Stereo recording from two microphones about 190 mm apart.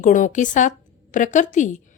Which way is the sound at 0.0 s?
40° left (ahead or behind).